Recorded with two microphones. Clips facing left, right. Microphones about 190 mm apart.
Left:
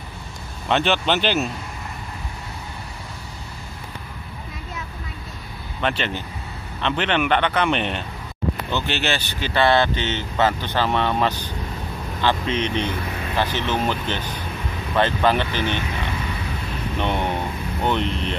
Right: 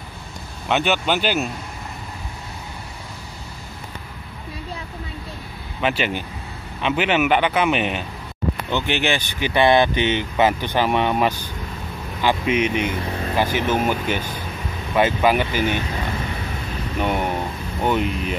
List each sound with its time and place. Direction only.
0.7 s speech: 5° right (ahead or behind)
5.8 s speech: 5° right (ahead or behind)
13.0 s vehicle: 30° right (ahead or behind)
13.4 s speech: 10° right (ahead or behind)
17.0 s speech: 10° right (ahead or behind)